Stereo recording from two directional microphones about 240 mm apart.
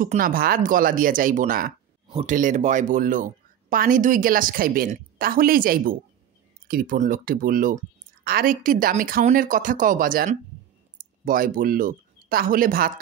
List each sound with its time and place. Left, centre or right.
0.0 s speech: right